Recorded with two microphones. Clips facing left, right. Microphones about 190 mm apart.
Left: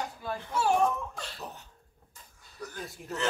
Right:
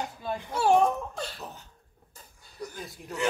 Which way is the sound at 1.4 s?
Centre (ahead or behind).